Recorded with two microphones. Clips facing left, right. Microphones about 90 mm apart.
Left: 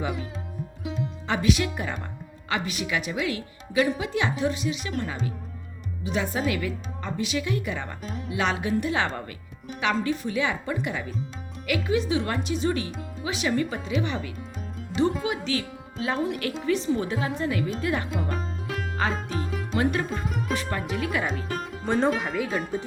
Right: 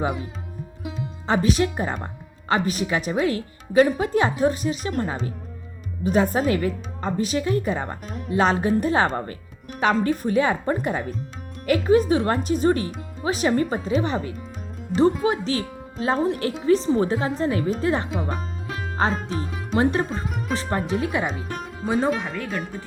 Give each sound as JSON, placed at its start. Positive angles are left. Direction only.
{"t": 0.0, "sound": "speech", "side_deg": -40}
{"t": 0.8, "sound": "music", "side_deg": 0}
{"t": 1.3, "sound": "speech", "side_deg": -35}
{"t": 8.0, "sound": "speech", "side_deg": 0}
{"t": 8.3, "sound": "speech", "side_deg": -40}
{"t": 18.1, "sound": "music", "side_deg": 0}
{"t": 19.7, "sound": "speech", "side_deg": -30}
{"t": 21.2, "sound": "speech", "side_deg": 0}